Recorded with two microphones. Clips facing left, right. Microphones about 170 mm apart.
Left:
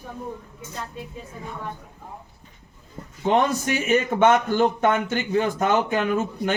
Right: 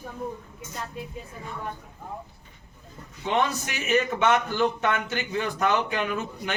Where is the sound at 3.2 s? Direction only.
45° left (ahead or behind).